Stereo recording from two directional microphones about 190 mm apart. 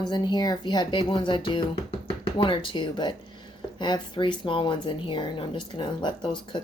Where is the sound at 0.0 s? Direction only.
20° left (ahead or behind).